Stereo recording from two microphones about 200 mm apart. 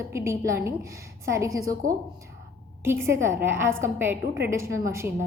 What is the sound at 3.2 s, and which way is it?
A woman's voice, 10° right (ahead or behind).